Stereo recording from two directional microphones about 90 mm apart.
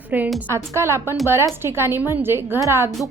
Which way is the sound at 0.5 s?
30° right (ahead or behind).